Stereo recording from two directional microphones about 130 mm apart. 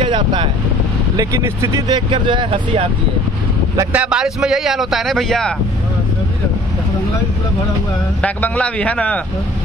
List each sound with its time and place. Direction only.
0.0 s vehicle: 40° right (ahead or behind)
1.1 s speech: 25° right (ahead or behind)
2.0 s speech: 40° right (ahead or behind)
3.9 s a man's voice: 10° right (ahead or behind)
8.2 s speech: 10° left (ahead or behind)